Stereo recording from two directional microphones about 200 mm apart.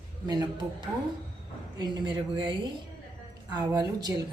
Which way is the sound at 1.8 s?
20° right (ahead or behind).